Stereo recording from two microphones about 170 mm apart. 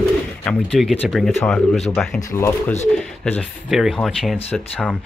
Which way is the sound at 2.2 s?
15° left (ahead or behind).